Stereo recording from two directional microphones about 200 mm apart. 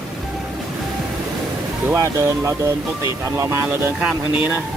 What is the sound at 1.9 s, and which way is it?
Speech, 15° right (ahead or behind).